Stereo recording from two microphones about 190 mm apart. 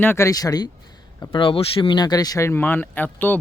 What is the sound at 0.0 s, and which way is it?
Speech, 15° left (ahead or behind).